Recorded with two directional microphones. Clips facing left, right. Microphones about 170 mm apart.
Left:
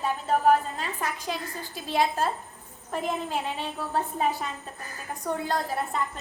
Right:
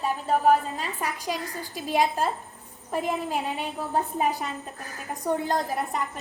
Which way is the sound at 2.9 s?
10° right (ahead or behind).